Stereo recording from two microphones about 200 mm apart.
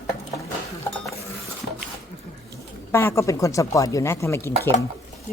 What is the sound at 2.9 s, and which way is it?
Speech, 15° left (ahead or behind).